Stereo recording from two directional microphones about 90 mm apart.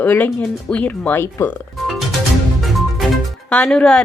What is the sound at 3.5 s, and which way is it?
Speech, 15° left (ahead or behind).